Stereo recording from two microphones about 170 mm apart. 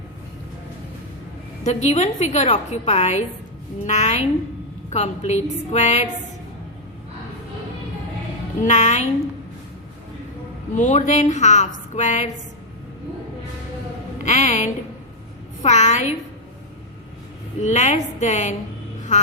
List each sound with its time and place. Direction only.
1.6 s a woman's voice: 40° left (ahead or behind)
8.6 s a woman's voice: 45° left (ahead or behind)
10.8 s a woman's voice: 45° left (ahead or behind)
14.3 s a woman's voice: 45° left (ahead or behind)
17.6 s a woman's voice: 40° left (ahead or behind)